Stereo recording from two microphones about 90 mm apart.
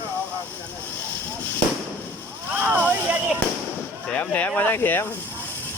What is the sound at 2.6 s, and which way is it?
Speech, 20° right (ahead or behind).